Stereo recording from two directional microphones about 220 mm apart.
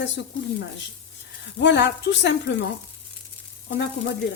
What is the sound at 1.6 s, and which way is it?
Speech, 55° left (ahead or behind).